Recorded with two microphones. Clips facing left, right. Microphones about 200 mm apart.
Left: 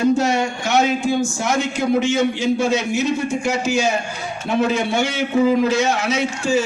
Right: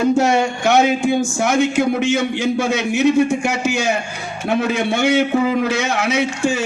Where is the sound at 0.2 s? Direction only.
55° right (ahead or behind).